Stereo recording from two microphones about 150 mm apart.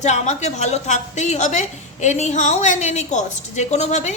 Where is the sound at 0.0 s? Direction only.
50° left (ahead or behind).